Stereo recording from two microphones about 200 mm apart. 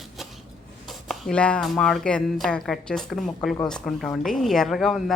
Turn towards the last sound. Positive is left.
turn(degrees=0)  # may be behind; listen again after turning